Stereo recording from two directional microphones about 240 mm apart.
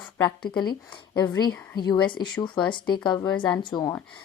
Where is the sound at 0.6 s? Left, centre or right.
Centre.